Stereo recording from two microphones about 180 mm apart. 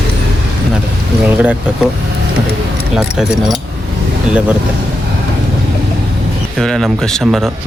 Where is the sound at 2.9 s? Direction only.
5° right (ahead or behind).